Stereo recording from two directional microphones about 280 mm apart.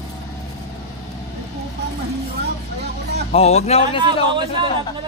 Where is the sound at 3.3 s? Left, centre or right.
Left.